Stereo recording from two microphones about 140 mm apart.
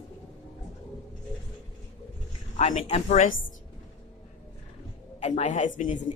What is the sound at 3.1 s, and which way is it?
Speech, 70° left (ahead or behind).